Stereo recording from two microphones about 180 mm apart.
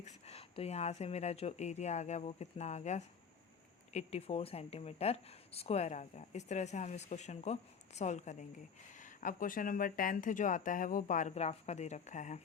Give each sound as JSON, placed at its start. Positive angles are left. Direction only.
{"t": 0.0, "sound": "speech", "side_deg": 35}